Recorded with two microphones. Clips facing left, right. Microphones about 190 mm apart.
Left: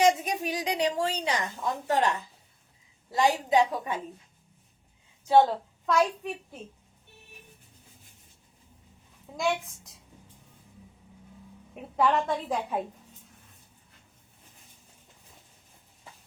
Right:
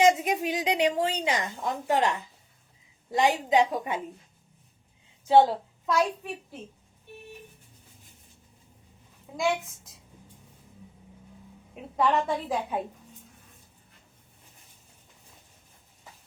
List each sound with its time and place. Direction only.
0.0 s a sound: 20° right (ahead or behind)
3.1 s a woman's voice: 20° right (ahead or behind)
5.3 s a woman's voice: 10° right (ahead or behind)
9.4 s a woman's voice: centre (ahead or behind)
11.9 s a woman's voice: centre (ahead or behind)